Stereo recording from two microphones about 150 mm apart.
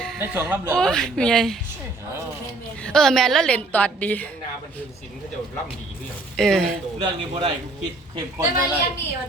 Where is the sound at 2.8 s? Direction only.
5° left (ahead or behind).